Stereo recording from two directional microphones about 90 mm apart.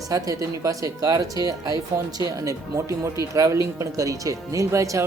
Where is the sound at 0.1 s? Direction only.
40° right (ahead or behind).